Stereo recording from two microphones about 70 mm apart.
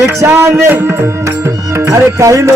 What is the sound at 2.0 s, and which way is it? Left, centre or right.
Music, right.